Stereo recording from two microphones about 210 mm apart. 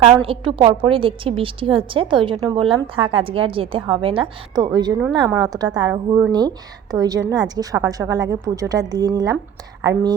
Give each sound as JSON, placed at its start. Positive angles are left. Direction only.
{"t": 0.2, "sound": "a woman's voice", "side_deg": -25}